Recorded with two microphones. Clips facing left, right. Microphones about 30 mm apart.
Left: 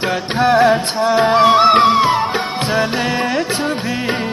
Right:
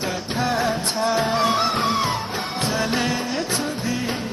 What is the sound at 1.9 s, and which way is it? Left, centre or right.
Music, left.